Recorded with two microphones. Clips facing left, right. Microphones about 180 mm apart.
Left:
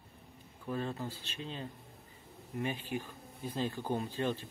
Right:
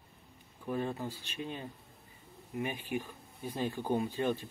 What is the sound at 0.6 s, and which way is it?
Speech, 15° right (ahead or behind).